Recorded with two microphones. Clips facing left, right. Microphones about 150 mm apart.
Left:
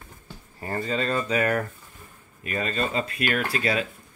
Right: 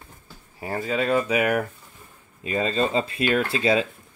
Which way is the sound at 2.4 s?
25° right (ahead or behind).